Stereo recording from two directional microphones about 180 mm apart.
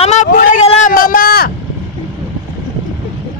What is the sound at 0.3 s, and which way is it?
Vehicle, 50° left (ahead or behind).